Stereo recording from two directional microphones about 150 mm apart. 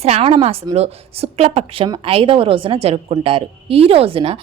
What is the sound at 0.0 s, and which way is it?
Speech, 45° right (ahead or behind).